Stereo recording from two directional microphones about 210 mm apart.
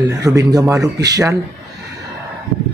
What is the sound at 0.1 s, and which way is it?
Speech, 15° right (ahead or behind).